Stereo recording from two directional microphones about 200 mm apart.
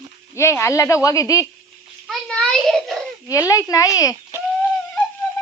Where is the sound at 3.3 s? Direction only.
15° left (ahead or behind).